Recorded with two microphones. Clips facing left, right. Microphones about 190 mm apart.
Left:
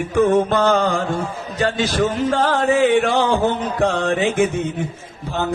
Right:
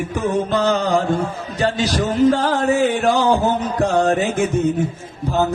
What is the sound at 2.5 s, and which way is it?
Music, 40° right (ahead or behind).